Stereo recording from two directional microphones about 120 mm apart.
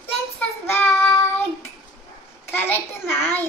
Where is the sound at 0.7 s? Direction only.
20° left (ahead or behind).